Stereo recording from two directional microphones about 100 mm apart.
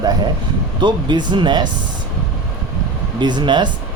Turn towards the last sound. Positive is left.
turn(degrees=-50)  # may be behind; listen again after turning